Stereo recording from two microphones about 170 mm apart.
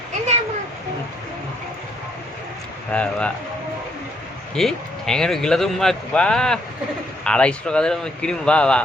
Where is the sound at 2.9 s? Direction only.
5° left (ahead or behind).